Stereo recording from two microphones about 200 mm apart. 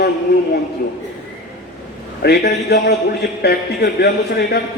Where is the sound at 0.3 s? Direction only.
55° left (ahead or behind).